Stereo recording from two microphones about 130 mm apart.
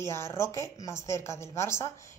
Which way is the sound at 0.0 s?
20° left (ahead or behind).